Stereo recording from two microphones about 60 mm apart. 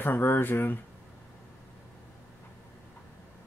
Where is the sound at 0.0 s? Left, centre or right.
Left.